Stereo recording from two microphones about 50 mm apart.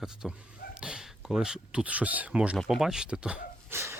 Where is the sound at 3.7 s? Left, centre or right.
Right.